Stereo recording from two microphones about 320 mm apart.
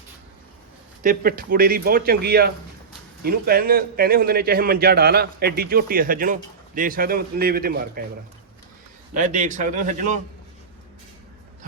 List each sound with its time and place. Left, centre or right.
1.0 s a man's voice: right
9.1 s a man's voice: right